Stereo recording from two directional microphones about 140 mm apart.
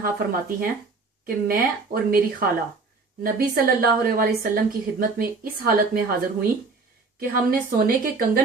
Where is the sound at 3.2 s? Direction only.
90° right.